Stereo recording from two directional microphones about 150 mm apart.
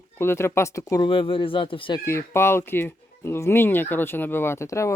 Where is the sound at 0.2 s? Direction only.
15° left (ahead or behind).